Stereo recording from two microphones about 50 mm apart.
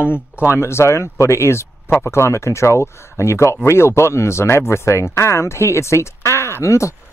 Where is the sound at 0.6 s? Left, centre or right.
Left.